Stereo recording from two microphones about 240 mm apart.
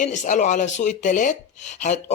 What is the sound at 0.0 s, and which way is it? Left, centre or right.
Speech, left.